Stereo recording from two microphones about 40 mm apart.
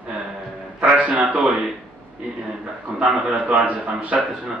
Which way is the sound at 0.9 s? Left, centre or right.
Right.